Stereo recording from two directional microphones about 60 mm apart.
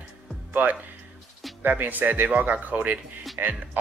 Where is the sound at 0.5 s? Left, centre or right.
Right.